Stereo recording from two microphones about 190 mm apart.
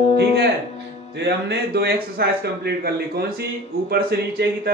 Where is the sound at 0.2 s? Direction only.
60° right (ahead or behind).